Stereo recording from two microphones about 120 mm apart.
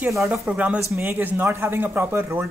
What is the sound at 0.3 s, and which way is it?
A man's voice, 10° right (ahead or behind).